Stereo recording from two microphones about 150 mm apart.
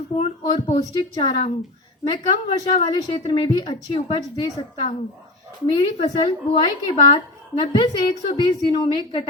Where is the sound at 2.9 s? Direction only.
35° left (ahead or behind).